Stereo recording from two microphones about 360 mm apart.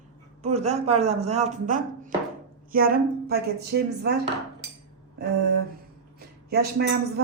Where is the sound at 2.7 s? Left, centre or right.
Right.